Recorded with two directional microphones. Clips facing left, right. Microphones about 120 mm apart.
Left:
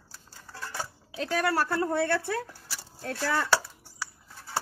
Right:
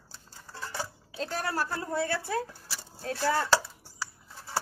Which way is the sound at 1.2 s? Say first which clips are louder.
Left 5 dB; 75° left (ahead or behind).